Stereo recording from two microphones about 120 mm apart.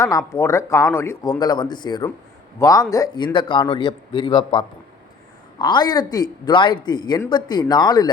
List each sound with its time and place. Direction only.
0.0 s speech: 25° left (ahead or behind)
3.3 s a man's voice: 45° left (ahead or behind)